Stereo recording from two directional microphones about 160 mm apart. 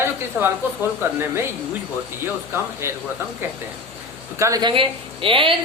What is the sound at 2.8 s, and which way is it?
Speech, 15° right (ahead or behind).